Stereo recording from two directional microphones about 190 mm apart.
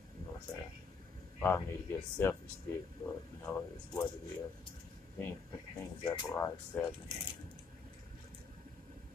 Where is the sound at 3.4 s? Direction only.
15° left (ahead or behind).